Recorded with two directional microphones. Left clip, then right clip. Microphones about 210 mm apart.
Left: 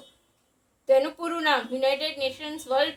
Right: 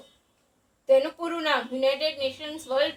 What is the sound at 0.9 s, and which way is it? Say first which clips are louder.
A woman's voice: even; 30° left (ahead or behind).